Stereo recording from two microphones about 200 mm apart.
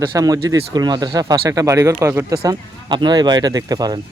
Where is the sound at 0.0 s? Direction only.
20° right (ahead or behind).